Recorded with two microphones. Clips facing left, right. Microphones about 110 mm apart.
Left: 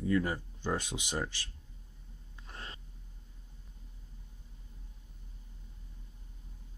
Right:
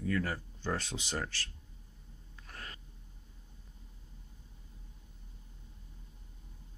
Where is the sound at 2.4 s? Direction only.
25° left (ahead or behind).